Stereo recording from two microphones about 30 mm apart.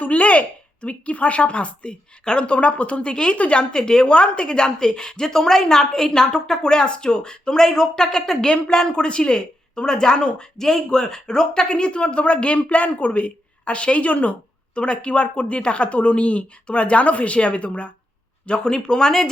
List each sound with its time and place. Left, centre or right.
0.0 s speech: left
2.5 s speech: left
3.3 s speech: left
3.6 s a woman's voice: left
8.9 s a woman's voice: left
14.8 s speech: left
18.4 s a woman's voice: left